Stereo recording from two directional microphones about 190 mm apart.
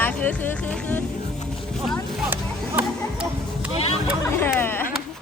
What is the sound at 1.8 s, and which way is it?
Vehicle, centre (ahead or behind).